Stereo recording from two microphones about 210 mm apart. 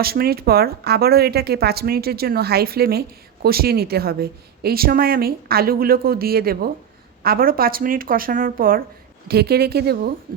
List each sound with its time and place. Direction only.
0.0 s a woman's voice: 45° right (ahead or behind)